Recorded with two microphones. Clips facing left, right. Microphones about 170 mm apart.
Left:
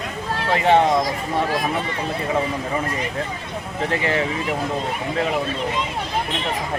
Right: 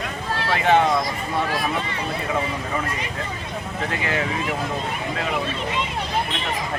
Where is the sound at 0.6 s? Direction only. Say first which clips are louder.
Left 2 dB; 35° left (ahead or behind).